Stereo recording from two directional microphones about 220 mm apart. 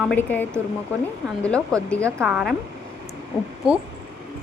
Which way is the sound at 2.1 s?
10° right (ahead or behind).